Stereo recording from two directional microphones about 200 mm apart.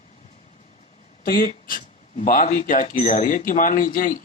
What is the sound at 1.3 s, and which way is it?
Speech, 45° left (ahead or behind).